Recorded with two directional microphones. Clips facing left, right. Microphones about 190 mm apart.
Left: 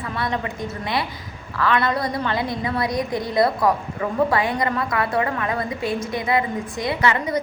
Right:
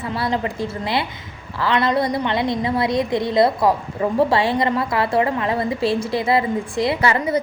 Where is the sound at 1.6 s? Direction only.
25° right (ahead or behind).